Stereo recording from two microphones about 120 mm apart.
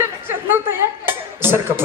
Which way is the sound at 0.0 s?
20° right (ahead or behind).